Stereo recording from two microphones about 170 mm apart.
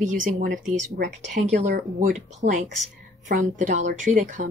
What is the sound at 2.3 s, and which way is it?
Speech, 45° right (ahead or behind).